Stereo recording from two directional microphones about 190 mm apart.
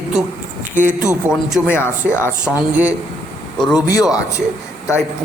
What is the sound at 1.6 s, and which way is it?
Speech, 10° left (ahead or behind).